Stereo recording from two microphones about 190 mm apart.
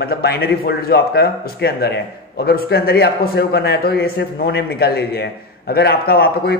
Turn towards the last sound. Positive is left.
turn(degrees=55)  # may be behind; listen again after turning